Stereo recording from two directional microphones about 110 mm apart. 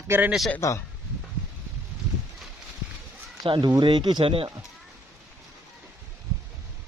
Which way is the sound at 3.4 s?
40° right (ahead or behind).